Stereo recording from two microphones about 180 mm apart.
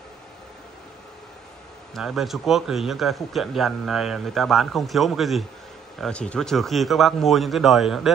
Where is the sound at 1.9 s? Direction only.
Centre (ahead or behind).